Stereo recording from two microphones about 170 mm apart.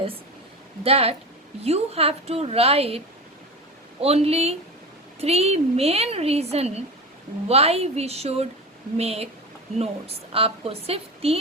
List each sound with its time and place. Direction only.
0.9 s a woman's voice: 35° right (ahead or behind)
4.0 s a woman's voice: 35° right (ahead or behind)